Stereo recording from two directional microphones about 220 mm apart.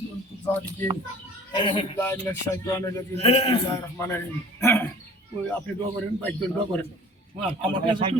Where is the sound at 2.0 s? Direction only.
10° left (ahead or behind).